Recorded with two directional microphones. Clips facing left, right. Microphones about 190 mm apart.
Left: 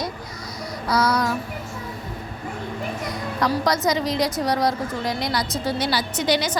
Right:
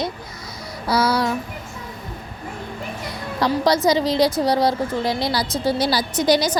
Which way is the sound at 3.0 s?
30° right (ahead or behind).